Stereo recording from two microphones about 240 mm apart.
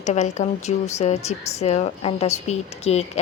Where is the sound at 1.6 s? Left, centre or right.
Left.